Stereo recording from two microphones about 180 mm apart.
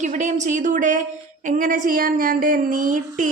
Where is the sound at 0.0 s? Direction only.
40° right (ahead or behind).